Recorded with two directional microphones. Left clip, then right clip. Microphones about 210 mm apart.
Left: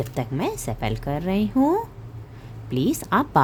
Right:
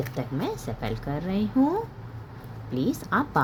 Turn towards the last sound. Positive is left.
turn(degrees=55)  # may be behind; listen again after turning